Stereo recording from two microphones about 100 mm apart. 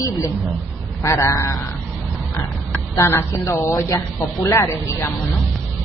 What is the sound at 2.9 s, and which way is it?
Speech, 30° left (ahead or behind).